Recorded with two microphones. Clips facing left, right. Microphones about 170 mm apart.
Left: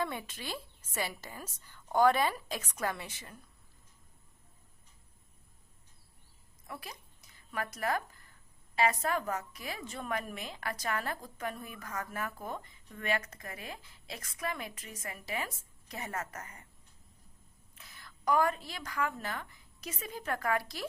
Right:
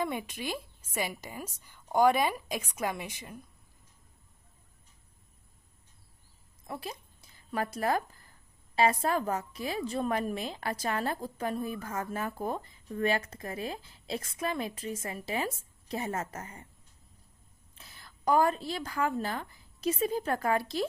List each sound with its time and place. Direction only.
0.0 s a woman's voice: 15° right (ahead or behind)
6.7 s a woman's voice: 30° right (ahead or behind)
17.7 s a woman's voice: 30° right (ahead or behind)